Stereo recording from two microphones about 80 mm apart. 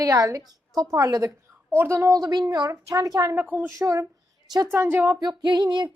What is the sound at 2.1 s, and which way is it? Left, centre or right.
Speech, right.